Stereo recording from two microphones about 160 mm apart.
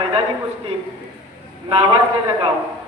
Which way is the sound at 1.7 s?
30° right (ahead or behind).